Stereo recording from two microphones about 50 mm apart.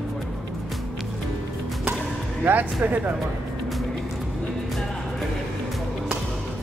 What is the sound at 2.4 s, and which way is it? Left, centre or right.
Speech, right.